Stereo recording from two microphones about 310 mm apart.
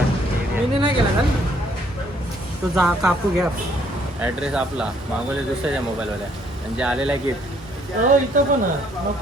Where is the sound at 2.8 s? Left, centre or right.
Centre.